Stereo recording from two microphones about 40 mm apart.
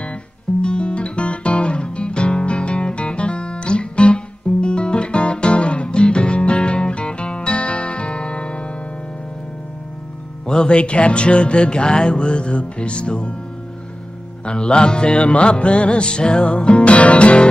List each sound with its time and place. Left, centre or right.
0.6 s guitar: left
10.4 s music: left
14.4 s music: left